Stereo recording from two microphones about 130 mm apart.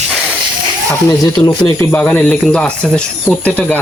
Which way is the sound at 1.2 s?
30° left (ahead or behind).